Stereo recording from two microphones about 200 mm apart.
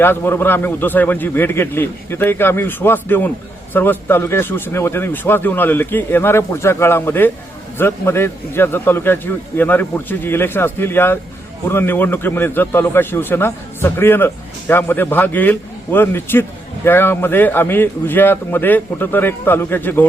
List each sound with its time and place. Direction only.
0.0 s a man's voice: 10° left (ahead or behind)